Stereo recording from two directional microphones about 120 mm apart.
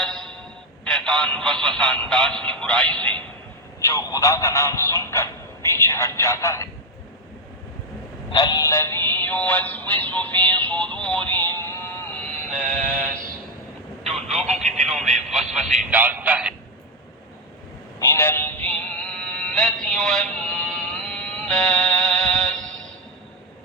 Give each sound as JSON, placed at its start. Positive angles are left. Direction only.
{"t": 0.0, "sound": "a sound", "side_deg": 5}
{"t": 0.9, "sound": "speech", "side_deg": 5}
{"t": 3.8, "sound": "speech", "side_deg": 25}
{"t": 8.3, "sound": "synthetic singing", "side_deg": 35}
{"t": 12.5, "sound": "synthetic singing", "side_deg": -90}
{"t": 14.0, "sound": "telephone", "side_deg": 5}
{"t": 14.5, "sound": "speech", "side_deg": 0}
{"t": 16.0, "sound": "speech", "side_deg": -15}
{"t": 18.0, "sound": "music", "side_deg": 20}